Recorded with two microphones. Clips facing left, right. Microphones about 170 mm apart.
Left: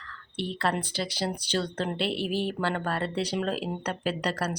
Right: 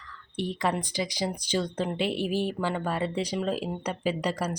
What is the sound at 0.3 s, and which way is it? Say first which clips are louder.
A woman's voice: right 1 dB; 15° right (ahead or behind).